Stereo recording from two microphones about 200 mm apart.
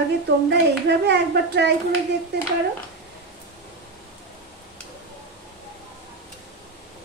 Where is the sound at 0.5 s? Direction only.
60° right (ahead or behind).